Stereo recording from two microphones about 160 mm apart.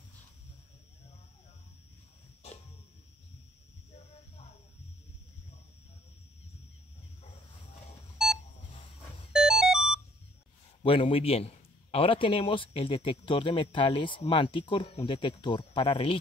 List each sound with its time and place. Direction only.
9.3 s music: 5° right (ahead or behind)
10.8 s a man's voice: 35° left (ahead or behind)